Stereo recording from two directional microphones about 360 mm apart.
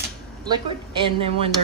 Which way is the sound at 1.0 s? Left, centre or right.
Centre.